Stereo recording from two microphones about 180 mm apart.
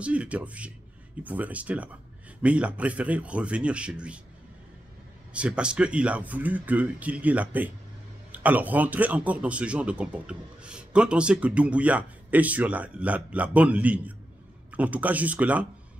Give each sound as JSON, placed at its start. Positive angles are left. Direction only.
{"t": 0.0, "sound": "speech", "side_deg": -5}
{"t": 5.3, "sound": "speech", "side_deg": -5}